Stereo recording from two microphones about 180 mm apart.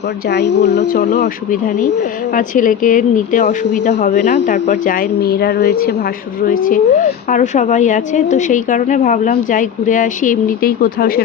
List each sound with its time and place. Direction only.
0.3 s speech: 70° left (ahead or behind)
0.9 s a woman's voice: 45° left (ahead or behind)